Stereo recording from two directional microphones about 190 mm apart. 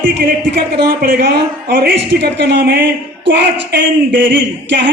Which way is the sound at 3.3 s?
65° right (ahead or behind).